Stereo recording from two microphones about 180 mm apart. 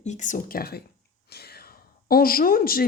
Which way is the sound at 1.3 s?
60° left (ahead or behind).